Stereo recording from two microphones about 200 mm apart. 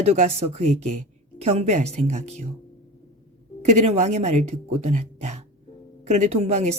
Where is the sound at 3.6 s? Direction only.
35° right (ahead or behind).